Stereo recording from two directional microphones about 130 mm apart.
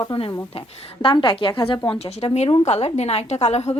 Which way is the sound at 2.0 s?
55° left (ahead or behind).